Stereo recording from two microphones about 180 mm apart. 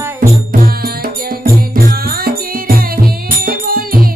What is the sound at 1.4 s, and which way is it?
Music, 55° right (ahead or behind).